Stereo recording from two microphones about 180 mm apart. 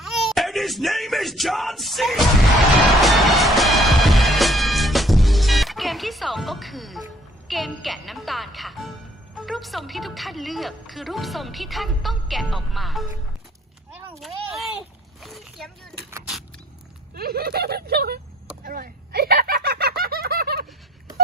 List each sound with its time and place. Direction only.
0.0 s speech: centre (ahead or behind)
3.0 s music: centre (ahead or behind)
9.5 s a woman's voice: centre (ahead or behind)
14.2 s a sound: centre (ahead or behind)
16.0 s vehicle: 15° right (ahead or behind)
17.2 s speech: 60° right (ahead or behind)
18.6 s a sound: 55° right (ahead or behind)